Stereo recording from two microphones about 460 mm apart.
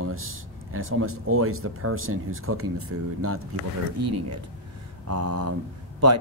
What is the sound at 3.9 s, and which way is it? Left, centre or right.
Speech, right.